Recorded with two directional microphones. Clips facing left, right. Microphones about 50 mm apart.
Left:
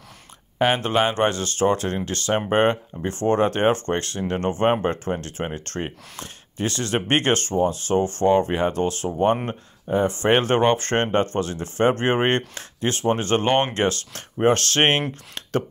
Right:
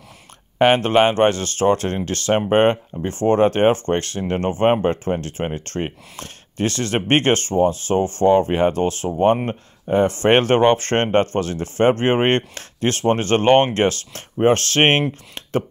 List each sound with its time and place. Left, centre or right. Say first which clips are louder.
0.6 s speech: right 5 dB; right
4.8 s speech: right 4 dB; right
5.4 s speech: right 4 dB; right
5.7 s speech: right 4 dB; centre
6.1 s speech: right 4 dB; right
10.5 s speech: right 4 dB; right